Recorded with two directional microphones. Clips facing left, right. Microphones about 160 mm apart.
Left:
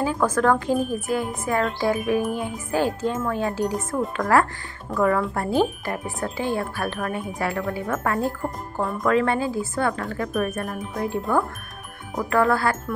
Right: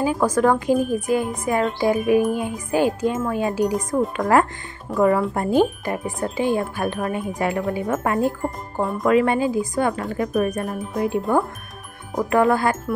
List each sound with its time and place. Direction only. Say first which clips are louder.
0.0 s speech: right 3 dB; 15° right (ahead or behind)